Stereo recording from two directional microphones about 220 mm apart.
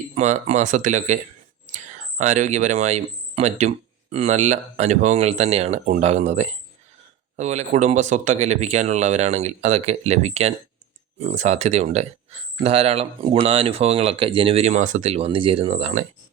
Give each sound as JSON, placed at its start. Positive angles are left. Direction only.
{"t": 0.1, "sound": "speech", "side_deg": -30}